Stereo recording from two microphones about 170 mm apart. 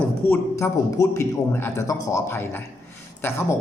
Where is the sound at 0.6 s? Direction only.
15° left (ahead or behind).